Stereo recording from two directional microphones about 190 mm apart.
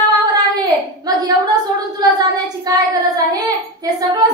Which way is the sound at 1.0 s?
20° right (ahead or behind).